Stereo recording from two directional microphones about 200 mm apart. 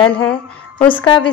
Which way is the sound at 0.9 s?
25° left (ahead or behind).